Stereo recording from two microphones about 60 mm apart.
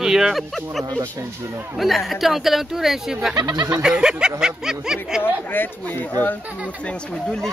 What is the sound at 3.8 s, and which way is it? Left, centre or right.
Speech, centre.